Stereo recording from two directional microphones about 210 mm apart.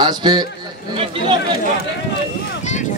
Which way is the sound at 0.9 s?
25° right (ahead or behind).